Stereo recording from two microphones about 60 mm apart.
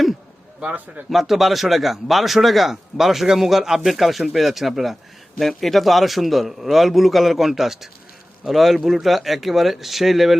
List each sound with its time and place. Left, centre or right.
0.6 s a man's voice: right
1.1 s speech: centre